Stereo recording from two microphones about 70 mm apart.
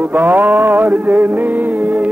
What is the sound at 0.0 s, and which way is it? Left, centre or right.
Music, right.